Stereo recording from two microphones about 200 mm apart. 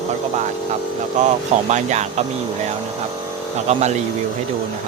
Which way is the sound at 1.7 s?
35° right (ahead or behind).